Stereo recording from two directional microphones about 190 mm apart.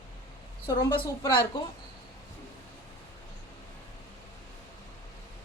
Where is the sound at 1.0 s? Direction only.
25° left (ahead or behind).